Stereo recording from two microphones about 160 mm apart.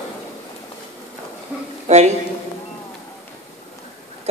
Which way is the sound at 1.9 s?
45° right (ahead or behind).